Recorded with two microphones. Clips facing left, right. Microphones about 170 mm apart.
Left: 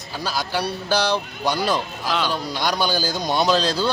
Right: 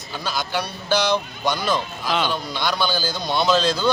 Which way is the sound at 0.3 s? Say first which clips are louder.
Left 1 dB; 35° left (ahead or behind).